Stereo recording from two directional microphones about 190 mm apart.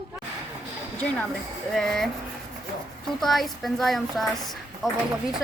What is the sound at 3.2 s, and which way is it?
A woman's voice, centre (ahead or behind).